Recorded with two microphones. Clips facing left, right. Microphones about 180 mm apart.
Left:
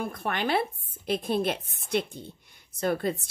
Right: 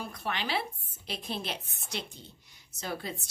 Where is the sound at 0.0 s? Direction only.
50° left (ahead or behind).